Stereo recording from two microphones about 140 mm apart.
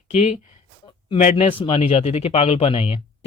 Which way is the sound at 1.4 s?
35° left (ahead or behind).